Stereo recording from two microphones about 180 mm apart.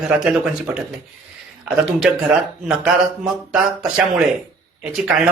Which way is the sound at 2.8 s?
5° right (ahead or behind).